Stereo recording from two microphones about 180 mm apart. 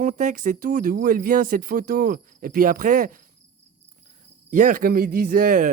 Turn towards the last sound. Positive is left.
turn(degrees=-50)  # may be behind; listen again after turning